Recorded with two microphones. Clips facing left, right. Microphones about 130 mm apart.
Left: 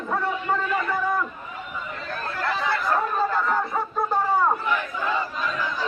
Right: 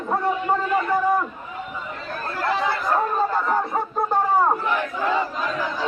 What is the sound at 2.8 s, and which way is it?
Chatter, 20° right (ahead or behind).